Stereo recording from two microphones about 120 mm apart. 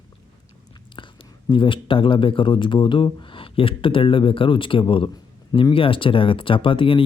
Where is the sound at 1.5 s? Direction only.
45° left (ahead or behind).